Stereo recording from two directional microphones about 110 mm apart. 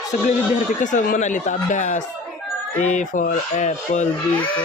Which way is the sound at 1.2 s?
90° left.